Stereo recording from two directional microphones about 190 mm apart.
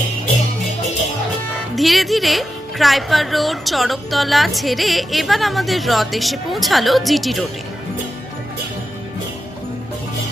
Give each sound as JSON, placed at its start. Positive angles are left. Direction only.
{"t": 1.5, "sound": "speech", "side_deg": 0}